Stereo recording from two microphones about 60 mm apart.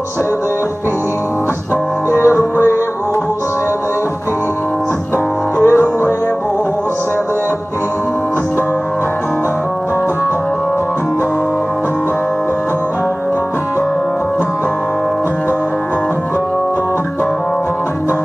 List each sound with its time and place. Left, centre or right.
2.0 s music: left
5.6 s music: left